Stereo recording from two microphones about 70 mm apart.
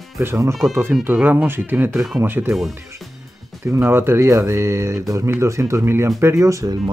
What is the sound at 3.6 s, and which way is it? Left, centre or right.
Speech, right.